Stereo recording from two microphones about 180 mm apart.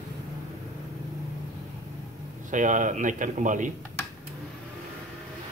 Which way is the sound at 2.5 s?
45° right (ahead or behind).